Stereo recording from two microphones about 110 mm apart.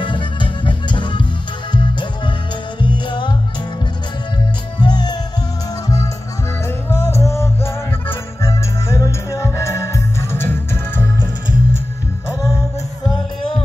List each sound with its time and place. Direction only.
0.0 s music: 45° left (ahead or behind)
4.7 s music: 40° left (ahead or behind)
6.9 s music: 20° left (ahead or behind)